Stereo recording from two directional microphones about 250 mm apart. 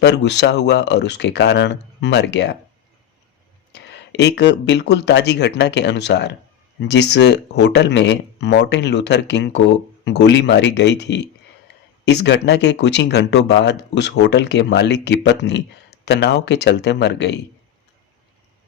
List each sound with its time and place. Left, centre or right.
0.0 s speech: left
3.7 s speech: left